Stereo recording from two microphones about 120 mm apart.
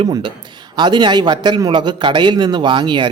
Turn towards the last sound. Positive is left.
turn(degrees=-40)  # may be behind; listen again after turning